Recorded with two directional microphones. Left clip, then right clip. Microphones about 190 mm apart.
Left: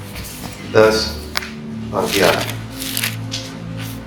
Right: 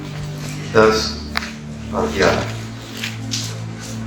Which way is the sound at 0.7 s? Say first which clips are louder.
Left 1 dB; 35° left (ahead or behind).